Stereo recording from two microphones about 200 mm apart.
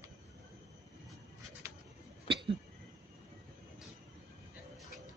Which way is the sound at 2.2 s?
25° right (ahead or behind).